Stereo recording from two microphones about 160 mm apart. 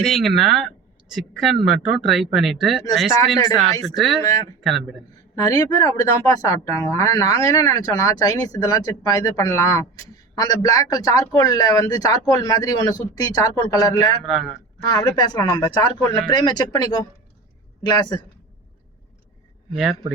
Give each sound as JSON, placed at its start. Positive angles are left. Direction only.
{"t": 0.0, "sound": "speech", "side_deg": 0}
{"t": 5.1, "sound": "speech", "side_deg": 25}
{"t": 14.3, "sound": "speech", "side_deg": 0}
{"t": 14.8, "sound": "speech", "side_deg": 25}
{"t": 19.7, "sound": "speech", "side_deg": -5}